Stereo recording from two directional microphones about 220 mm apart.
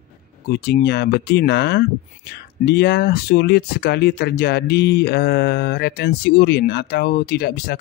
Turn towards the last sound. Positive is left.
turn(degrees=45)  # may be behind; listen again after turning